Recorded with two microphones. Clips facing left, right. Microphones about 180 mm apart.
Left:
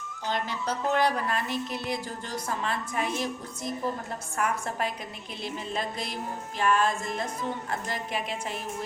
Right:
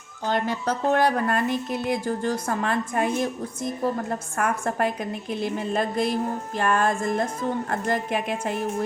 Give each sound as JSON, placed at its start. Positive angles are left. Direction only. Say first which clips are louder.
{"t": 0.3, "sound": "a woman's voice", "louder": "right 6 dB", "side_deg": -50}